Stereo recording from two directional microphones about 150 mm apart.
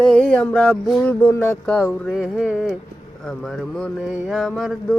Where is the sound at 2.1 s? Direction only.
5° right (ahead or behind).